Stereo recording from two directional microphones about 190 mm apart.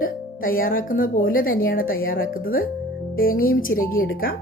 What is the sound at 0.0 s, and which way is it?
Speech, 50° left (ahead or behind).